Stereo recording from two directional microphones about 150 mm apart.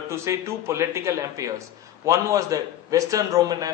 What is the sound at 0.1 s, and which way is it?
A man's voice, 20° right (ahead or behind).